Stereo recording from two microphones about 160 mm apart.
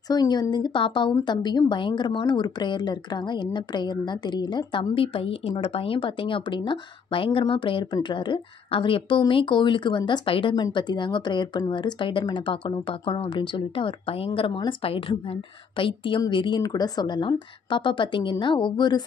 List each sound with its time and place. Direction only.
0.1 s a woman's voice: 25° left (ahead or behind)